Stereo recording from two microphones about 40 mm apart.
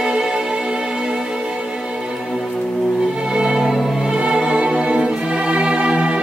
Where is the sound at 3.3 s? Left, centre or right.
Centre.